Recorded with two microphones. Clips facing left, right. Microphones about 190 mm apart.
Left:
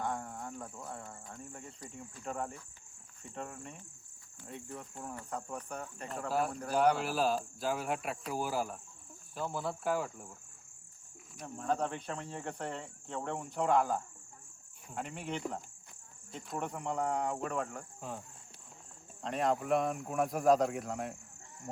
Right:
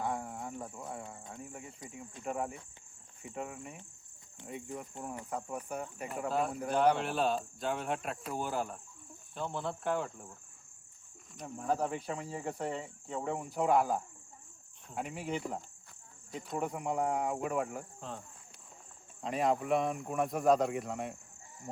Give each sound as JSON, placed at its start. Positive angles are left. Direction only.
{"t": 0.0, "sound": "cricket", "side_deg": -10}
{"t": 1.0, "sound": "a sound", "side_deg": -20}
{"t": 1.3, "sound": "cricket", "side_deg": -5}
{"t": 6.7, "sound": "cricket", "side_deg": 5}
{"t": 11.3, "sound": "cricket", "side_deg": -5}
{"t": 19.2, "sound": "cricket", "side_deg": 0}